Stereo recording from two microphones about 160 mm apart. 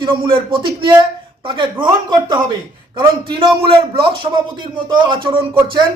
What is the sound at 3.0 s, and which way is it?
Speech, 30° right (ahead or behind).